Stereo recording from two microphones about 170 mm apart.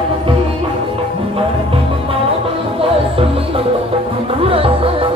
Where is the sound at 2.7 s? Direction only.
35° right (ahead or behind).